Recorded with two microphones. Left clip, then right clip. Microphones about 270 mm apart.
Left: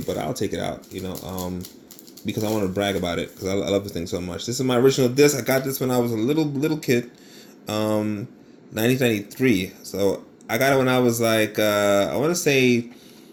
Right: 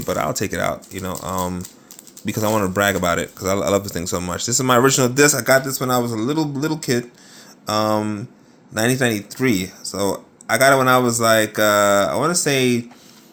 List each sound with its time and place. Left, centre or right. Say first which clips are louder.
0.3 s speech: right 5 dB; right
2.2 s speech: right 5 dB; right